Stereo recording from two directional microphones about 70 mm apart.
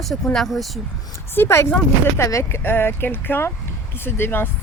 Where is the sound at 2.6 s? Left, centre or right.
Left.